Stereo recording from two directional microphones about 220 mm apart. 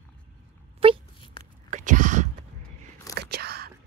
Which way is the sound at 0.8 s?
25° right (ahead or behind).